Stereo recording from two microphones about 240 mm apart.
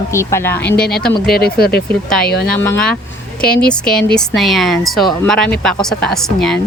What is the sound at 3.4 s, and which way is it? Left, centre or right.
Speech, left.